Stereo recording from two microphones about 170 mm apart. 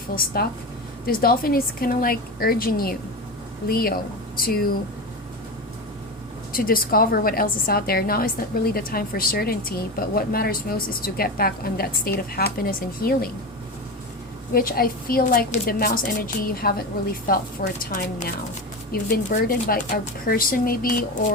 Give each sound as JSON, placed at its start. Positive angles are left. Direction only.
{"t": 0.4, "sound": "a woman's voice", "side_deg": 65}
{"t": 6.5, "sound": "a woman's voice", "side_deg": 55}
{"t": 14.5, "sound": "a woman's voice", "side_deg": 60}